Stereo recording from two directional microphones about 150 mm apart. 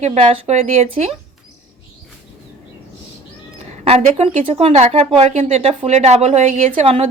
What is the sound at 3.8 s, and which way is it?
A woman's voice, 45° right (ahead or behind).